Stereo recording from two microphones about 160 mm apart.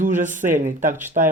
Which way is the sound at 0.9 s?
15° right (ahead or behind).